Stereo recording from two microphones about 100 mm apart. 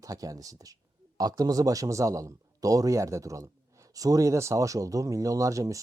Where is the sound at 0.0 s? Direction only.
35° right (ahead or behind).